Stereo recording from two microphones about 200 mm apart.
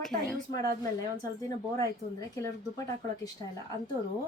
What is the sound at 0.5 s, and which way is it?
Speech, 15° left (ahead or behind).